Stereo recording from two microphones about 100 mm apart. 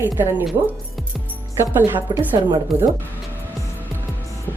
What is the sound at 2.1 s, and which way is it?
Speech, 50° right (ahead or behind).